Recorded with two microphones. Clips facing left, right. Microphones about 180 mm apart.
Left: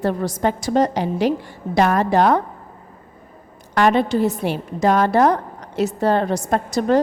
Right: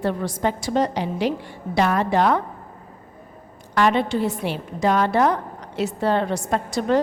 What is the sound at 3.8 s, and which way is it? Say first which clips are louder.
A woman's voice: left 3 dB; 45° left (ahead or behind).